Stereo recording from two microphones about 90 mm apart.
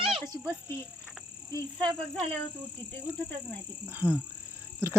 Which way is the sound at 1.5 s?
55° right (ahead or behind).